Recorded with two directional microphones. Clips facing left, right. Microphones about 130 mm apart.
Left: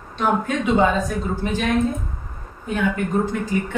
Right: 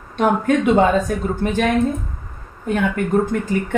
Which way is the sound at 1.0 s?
55° right (ahead or behind).